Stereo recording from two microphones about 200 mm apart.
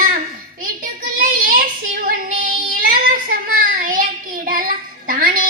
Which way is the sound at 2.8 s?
45° right (ahead or behind).